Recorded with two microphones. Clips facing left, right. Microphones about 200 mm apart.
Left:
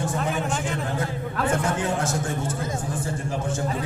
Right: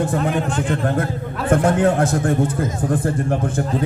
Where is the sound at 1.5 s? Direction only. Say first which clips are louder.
Right 10 dB; 55° right (ahead or behind).